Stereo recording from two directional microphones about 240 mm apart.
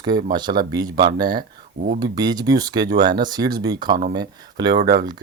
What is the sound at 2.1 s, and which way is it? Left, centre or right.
Speech, centre.